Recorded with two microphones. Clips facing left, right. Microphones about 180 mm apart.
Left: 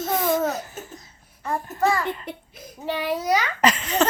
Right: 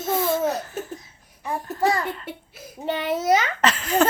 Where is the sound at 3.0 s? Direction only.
25° right (ahead or behind).